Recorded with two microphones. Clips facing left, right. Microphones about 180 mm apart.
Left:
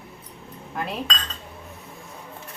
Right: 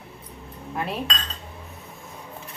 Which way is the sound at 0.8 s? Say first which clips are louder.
Right 1 dB; centre (ahead or behind).